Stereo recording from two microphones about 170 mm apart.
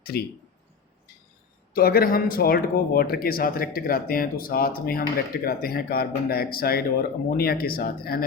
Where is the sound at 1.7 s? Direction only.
60° left (ahead or behind).